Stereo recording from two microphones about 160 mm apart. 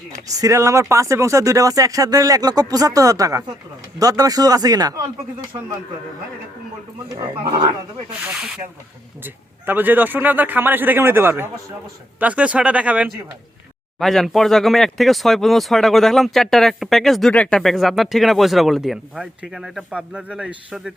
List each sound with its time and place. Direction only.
0.3 s speech: 20° right (ahead or behind)
8.4 s a man's voice: 5° right (ahead or behind)